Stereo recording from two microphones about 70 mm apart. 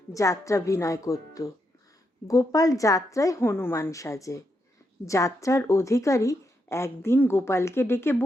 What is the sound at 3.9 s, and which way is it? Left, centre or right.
A woman's voice, left.